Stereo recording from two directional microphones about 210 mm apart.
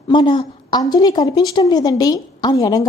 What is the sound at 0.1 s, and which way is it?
A woman's voice, 20° left (ahead or behind).